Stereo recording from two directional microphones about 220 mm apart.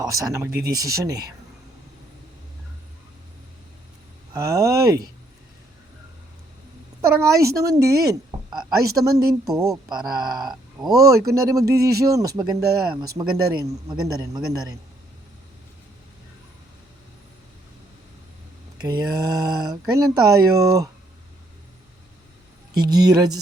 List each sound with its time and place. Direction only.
0.0 s a man's voice: 15° right (ahead or behind)
4.4 s speech: 15° right (ahead or behind)
7.2 s a man's voice: 15° right (ahead or behind)
18.8 s a man's voice: 20° right (ahead or behind)
22.7 s a man's voice: 20° right (ahead or behind)